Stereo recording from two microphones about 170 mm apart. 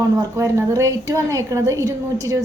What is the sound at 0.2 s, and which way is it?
A woman's voice, 20° right (ahead or behind).